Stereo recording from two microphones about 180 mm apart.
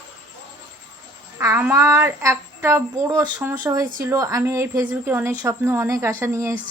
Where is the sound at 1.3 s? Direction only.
15° right (ahead or behind).